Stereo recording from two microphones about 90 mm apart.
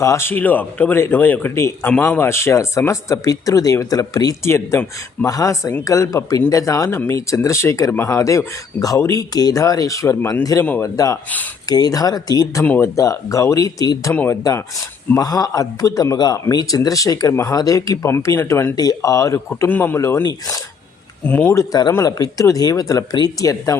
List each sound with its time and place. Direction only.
0.0 s speech: 30° left (ahead or behind)
4.4 s speech: 30° left (ahead or behind)
10.6 s speech: 25° left (ahead or behind)
10.8 s speech: 40° left (ahead or behind)
12.6 s speech: 20° left (ahead or behind)
13.0 s speech: 35° left (ahead or behind)
15.2 s speech: 45° left (ahead or behind); by 18.7 s 25° left (ahead or behind)
18.8 s speech: 40° left (ahead or behind); by 20.2 s 25° left (ahead or behind)
21.2 s speech: 20° left (ahead or behind)
21.5 s speech: 35° left (ahead or behind)